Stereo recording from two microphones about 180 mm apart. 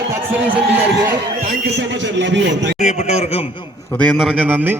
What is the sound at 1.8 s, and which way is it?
Speech, 85° right.